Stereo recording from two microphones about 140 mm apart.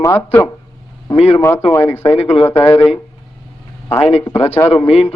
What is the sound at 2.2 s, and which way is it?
Speech, 45° left (ahead or behind).